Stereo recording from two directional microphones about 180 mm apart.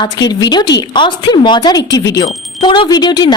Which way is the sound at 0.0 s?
25° left (ahead or behind).